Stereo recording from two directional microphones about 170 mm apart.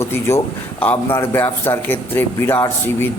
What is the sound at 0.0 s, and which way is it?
A man's voice, 15° left (ahead or behind).